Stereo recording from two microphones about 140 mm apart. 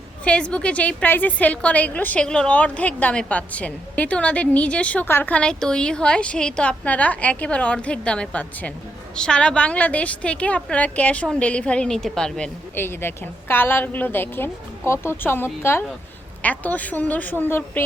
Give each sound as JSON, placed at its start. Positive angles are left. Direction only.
{"t": 0.3, "sound": "a woman's voice", "side_deg": 10}
{"t": 12.7, "sound": "a woman's voice", "side_deg": 15}